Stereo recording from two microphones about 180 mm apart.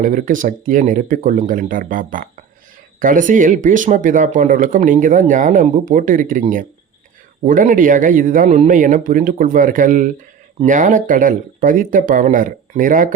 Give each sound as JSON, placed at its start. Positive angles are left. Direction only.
{"t": 0.0, "sound": "speech", "side_deg": -45}